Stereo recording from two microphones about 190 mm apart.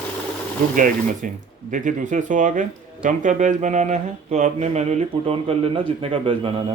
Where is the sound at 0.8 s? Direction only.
45° right (ahead or behind).